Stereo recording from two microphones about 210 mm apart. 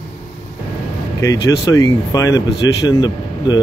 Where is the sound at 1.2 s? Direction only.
15° left (ahead or behind).